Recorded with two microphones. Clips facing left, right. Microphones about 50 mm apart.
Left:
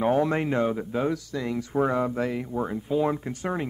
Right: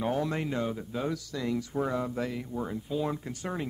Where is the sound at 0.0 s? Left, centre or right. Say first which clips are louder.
Left 7 dB; left.